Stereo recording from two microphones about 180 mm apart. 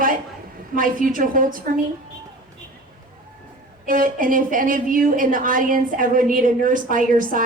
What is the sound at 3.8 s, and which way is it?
A woman's voice, 50° right (ahead or behind).